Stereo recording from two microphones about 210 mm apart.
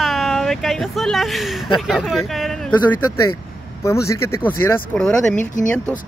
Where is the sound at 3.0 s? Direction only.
90° left.